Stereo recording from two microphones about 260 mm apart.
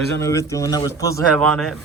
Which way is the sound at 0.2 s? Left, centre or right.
Centre.